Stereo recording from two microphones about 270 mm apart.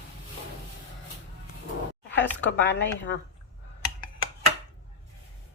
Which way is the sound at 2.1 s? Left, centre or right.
Left.